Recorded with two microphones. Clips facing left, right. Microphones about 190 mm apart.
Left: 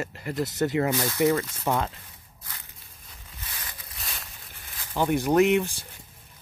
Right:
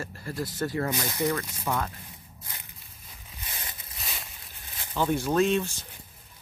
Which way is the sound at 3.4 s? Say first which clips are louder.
Right 1 dB; 25° right (ahead or behind).